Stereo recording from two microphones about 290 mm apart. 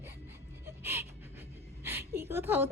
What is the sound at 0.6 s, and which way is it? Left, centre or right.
Music, centre.